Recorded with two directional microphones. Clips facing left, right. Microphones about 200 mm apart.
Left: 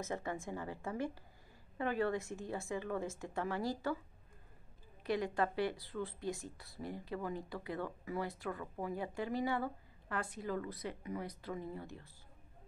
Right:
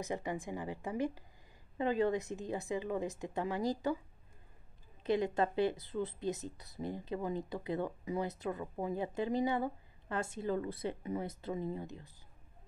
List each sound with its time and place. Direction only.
0.0 s a woman's voice: 15° right (ahead or behind)
5.0 s speech: 20° right (ahead or behind)